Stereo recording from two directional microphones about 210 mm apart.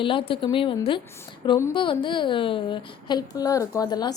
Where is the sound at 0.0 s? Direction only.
25° left (ahead or behind).